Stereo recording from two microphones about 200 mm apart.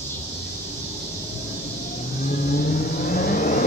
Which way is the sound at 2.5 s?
45° left (ahead or behind).